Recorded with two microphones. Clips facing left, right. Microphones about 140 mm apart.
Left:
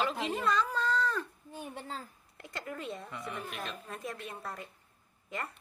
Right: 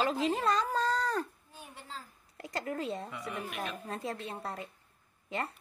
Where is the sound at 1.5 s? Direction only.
55° left (ahead or behind).